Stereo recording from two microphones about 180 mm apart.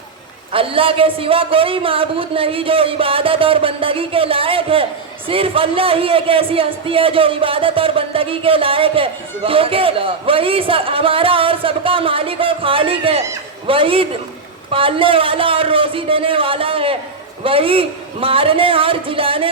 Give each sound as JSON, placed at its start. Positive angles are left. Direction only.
{"t": 0.5, "sound": "a man's voice", "side_deg": -30}